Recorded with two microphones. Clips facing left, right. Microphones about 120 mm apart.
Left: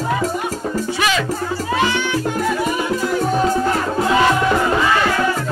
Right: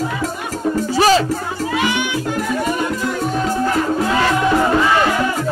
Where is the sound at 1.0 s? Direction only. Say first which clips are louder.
Right 8 dB; 35° right (ahead or behind).